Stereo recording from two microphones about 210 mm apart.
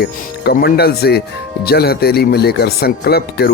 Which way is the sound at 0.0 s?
50° left (ahead or behind).